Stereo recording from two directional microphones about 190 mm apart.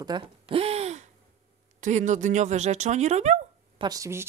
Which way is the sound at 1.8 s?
40° right (ahead or behind).